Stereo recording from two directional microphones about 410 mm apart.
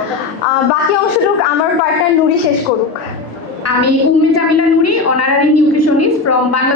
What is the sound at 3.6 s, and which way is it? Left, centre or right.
A woman's voice, left.